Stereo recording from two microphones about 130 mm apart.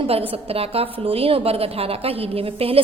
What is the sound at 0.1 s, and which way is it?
A woman's voice, 50° right (ahead or behind).